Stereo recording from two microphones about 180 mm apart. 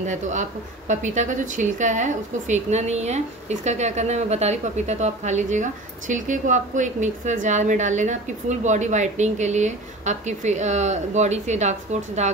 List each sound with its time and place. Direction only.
0.0 s speech: 40° right (ahead or behind)